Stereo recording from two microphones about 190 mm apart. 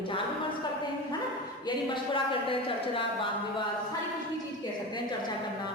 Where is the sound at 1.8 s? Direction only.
25° left (ahead or behind).